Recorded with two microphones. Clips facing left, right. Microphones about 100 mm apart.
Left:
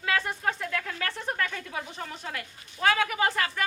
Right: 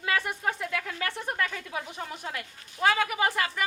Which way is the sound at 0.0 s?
15° right (ahead or behind).